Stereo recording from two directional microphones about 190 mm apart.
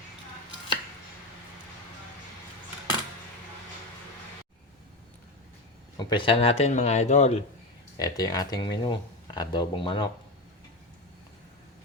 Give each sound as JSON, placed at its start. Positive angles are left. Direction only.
{"t": 6.0, "sound": "speech", "side_deg": 25}
{"t": 7.9, "sound": "speech", "side_deg": 20}